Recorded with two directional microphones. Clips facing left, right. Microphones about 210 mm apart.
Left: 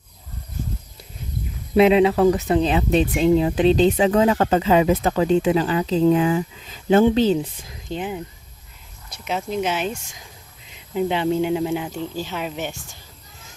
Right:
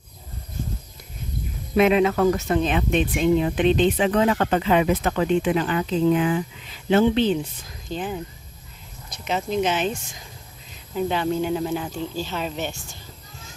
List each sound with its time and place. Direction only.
1.7 s speech: 30° left (ahead or behind)
7.9 s speech: 20° left (ahead or behind)
9.0 s speech: 10° left (ahead or behind)
10.9 s speech: 20° left (ahead or behind)